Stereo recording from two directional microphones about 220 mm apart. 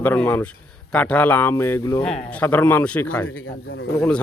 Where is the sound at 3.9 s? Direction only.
5° left (ahead or behind).